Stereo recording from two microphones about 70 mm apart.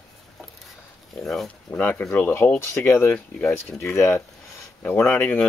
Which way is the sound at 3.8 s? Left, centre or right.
Left.